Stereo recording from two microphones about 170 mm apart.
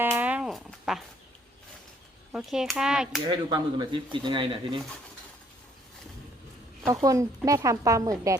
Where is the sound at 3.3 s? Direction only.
25° right (ahead or behind).